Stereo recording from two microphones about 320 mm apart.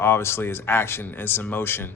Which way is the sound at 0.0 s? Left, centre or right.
Centre.